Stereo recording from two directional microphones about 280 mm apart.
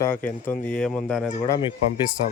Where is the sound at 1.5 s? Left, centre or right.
Centre.